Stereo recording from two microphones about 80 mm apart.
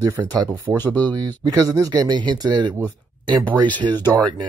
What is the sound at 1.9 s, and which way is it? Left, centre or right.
Speech, right.